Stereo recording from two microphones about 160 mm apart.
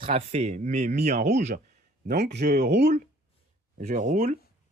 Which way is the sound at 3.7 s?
50° right (ahead or behind).